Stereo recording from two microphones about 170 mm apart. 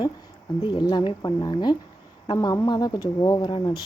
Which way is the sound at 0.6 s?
25° left (ahead or behind).